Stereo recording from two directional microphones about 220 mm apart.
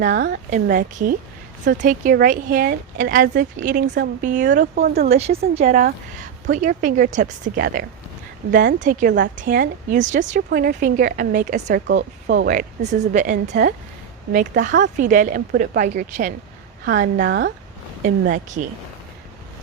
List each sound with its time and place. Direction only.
0.0 s speech: 50° right (ahead or behind)
0.5 s a woman's voice: 35° right (ahead or behind)
5.0 s a woman's voice: 30° right (ahead or behind)